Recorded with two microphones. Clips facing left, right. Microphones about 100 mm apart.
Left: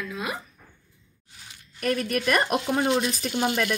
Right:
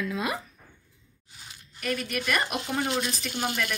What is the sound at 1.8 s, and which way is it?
Speech, 40° left (ahead or behind).